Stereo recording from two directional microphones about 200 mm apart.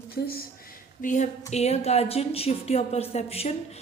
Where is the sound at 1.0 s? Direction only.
40° left (ahead or behind).